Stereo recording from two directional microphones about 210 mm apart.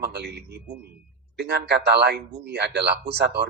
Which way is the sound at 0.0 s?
50° right (ahead or behind).